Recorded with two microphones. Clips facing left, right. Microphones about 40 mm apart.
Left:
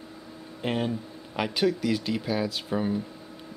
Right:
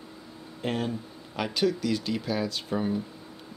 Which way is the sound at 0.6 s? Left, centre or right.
Centre.